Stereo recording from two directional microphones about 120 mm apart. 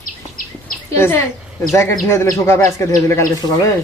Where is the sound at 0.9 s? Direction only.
20° left (ahead or behind).